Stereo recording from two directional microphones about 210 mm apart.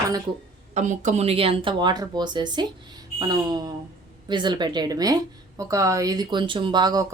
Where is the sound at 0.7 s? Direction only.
35° right (ahead or behind).